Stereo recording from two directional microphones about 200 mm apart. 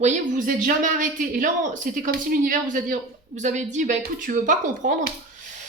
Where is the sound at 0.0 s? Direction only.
40° right (ahead or behind).